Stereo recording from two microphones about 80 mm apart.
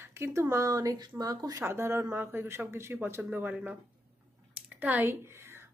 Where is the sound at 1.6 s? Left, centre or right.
Right.